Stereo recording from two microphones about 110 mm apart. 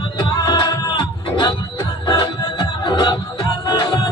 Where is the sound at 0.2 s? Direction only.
40° left (ahead or behind).